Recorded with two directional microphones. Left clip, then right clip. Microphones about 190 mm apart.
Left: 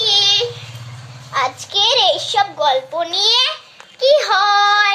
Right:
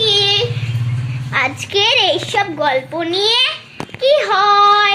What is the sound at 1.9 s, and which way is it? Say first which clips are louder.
Speech: even; 20° right (ahead or behind).